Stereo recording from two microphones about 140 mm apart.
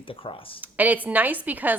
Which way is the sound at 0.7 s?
10° right (ahead or behind).